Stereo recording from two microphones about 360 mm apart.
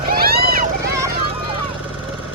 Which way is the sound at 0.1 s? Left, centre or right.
Right.